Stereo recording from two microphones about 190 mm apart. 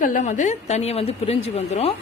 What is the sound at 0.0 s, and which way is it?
A woman's voice, 40° left (ahead or behind).